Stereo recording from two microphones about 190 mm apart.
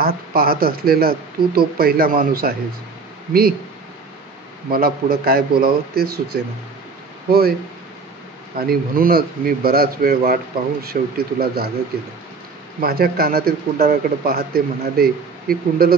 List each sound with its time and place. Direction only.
0.0 s speech: 55° right (ahead or behind)
4.6 s speech: 50° right (ahead or behind)
8.5 s speech: 50° right (ahead or behind)
12.8 s speech: 55° right (ahead or behind)